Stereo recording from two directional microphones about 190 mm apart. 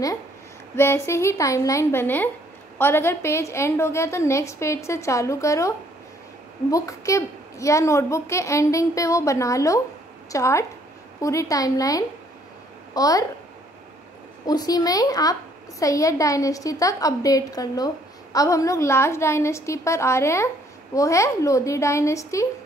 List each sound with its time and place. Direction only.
0.7 s a woman's voice: 15° left (ahead or behind)
14.4 s a woman's voice: 20° left (ahead or behind)